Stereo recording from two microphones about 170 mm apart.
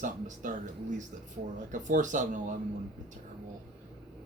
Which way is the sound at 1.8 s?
50° right (ahead or behind).